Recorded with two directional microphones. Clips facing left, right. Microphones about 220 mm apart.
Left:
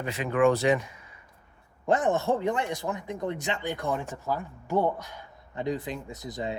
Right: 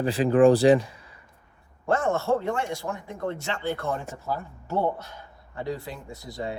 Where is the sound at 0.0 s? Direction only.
35° right (ahead or behind).